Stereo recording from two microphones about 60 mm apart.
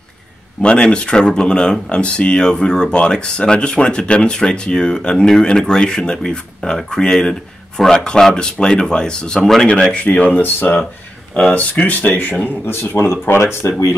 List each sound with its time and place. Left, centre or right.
0.6 s speech: centre
9.9 s speech: left
11.5 s speech: left